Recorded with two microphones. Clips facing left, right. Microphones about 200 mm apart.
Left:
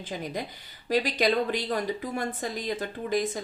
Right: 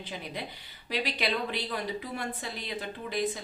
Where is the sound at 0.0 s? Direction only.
45° left (ahead or behind).